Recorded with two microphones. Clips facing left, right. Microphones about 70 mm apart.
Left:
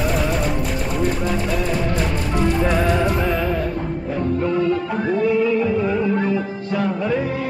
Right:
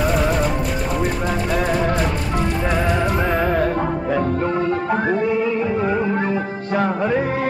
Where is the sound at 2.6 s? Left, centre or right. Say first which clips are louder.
Even; centre.